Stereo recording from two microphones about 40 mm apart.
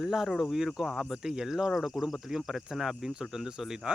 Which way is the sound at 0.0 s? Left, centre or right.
Centre.